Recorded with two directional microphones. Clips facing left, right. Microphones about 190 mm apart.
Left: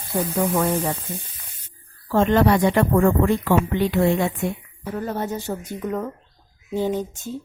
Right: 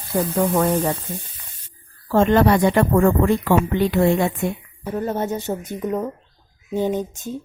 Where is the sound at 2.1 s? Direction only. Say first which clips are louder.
Right 2 dB; 45° right (ahead or behind).